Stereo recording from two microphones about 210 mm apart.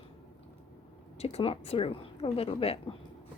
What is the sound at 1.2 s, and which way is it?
A woman's voice, 30° left (ahead or behind).